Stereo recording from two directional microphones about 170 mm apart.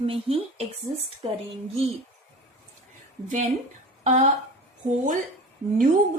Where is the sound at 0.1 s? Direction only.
35° right (ahead or behind).